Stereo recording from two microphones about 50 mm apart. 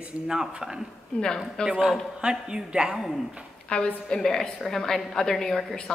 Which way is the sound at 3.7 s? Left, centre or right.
Left.